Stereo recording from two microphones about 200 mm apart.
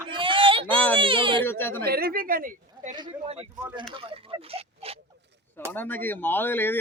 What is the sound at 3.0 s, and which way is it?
Speech, 30° right (ahead or behind).